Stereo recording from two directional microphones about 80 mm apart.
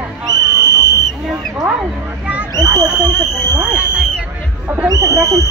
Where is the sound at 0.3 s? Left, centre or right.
Right.